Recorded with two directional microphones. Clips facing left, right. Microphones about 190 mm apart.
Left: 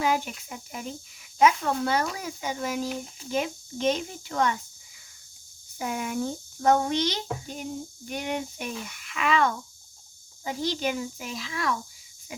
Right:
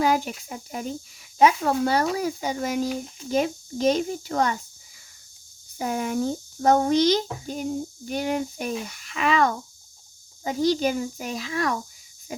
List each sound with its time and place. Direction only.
0.0 s a child's voice: 40° right (ahead or behind)
5.8 s a child's voice: 35° right (ahead or behind)
12.3 s wheeze: 40° right (ahead or behind)